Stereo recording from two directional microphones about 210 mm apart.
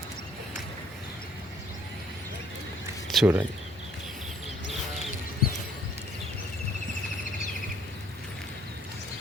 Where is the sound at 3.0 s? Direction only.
Centre (ahead or behind).